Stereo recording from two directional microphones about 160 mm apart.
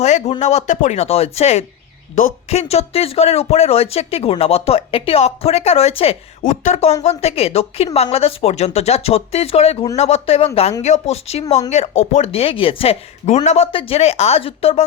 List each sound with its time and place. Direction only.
0.0 s speech: 45° left (ahead or behind)
6.4 s speech: 50° left (ahead or behind)
13.7 s speech: 35° left (ahead or behind)